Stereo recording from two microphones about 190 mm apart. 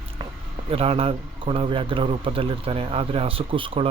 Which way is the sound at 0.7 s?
30° right (ahead or behind).